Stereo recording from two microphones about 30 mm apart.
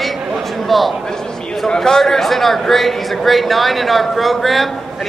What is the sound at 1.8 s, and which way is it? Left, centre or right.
Speech, centre.